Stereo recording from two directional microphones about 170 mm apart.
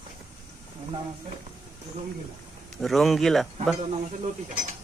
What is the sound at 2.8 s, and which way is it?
Speech, centre (ahead or behind).